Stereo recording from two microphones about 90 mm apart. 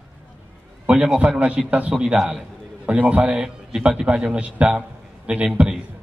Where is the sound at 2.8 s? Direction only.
15° right (ahead or behind).